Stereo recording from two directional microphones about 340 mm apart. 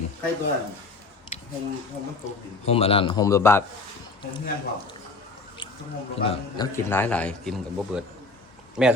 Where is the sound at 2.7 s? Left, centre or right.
Centre.